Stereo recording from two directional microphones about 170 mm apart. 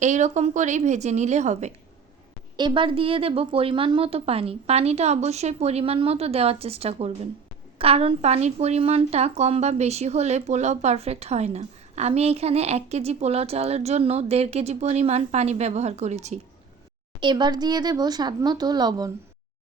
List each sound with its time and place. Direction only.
0.0 s a woman's voice: 45° right (ahead or behind)
2.6 s speech: 30° right (ahead or behind)
17.2 s speech: 25° right (ahead or behind)